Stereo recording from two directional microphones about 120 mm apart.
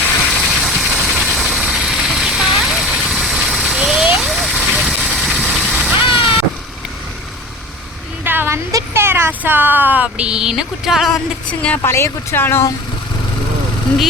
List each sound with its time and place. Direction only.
0.3 s vehicle: centre (ahead or behind)
6.0 s vehicle: 15° right (ahead or behind)
8.2 s speech: 20° right (ahead or behind); by 11.2 s centre (ahead or behind)
11.8 s speech: 20° left (ahead or behind)